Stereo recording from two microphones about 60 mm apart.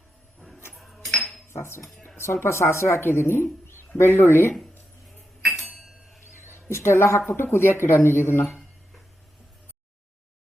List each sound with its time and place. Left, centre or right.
0.7 s music: centre
1.5 s cutlery: left
2.0 s speech: left
5.6 s a sound: centre
6.3 s speech: left